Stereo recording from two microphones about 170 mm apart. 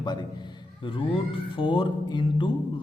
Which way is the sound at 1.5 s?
30° left (ahead or behind).